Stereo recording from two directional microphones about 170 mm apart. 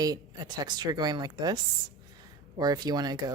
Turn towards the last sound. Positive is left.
turn(degrees=-25)  # may be behind; listen again after turning